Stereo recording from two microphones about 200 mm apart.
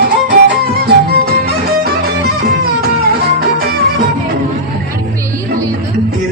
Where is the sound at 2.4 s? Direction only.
50° right (ahead or behind).